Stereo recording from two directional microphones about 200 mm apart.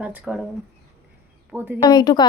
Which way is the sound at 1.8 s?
20° left (ahead or behind).